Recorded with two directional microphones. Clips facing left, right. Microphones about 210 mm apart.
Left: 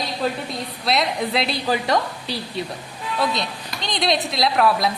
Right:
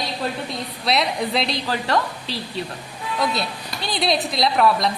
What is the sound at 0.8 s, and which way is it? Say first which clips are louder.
Speech: even; centre (ahead or behind).